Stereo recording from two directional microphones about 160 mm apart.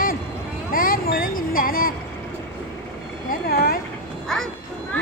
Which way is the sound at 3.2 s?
70° left (ahead or behind).